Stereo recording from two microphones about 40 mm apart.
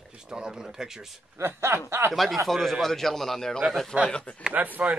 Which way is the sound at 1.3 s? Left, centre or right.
Right.